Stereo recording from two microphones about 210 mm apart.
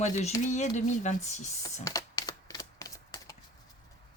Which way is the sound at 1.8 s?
15° left (ahead or behind).